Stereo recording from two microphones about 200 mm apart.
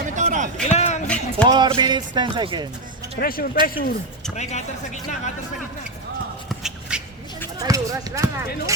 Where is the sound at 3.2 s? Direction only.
45° left (ahead or behind).